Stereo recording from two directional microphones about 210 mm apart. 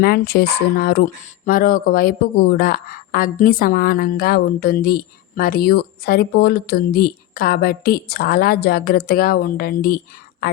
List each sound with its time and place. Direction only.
0.0 s speech: 50° left (ahead or behind)